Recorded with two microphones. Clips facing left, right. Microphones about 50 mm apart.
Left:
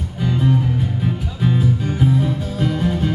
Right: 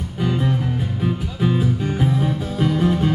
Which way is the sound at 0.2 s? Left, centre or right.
Centre.